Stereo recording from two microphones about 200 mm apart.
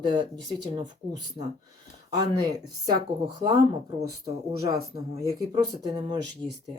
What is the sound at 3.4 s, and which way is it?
Speech, 20° right (ahead or behind).